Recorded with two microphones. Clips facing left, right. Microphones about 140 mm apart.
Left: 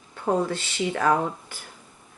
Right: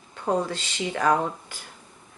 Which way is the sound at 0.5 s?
15° right (ahead or behind).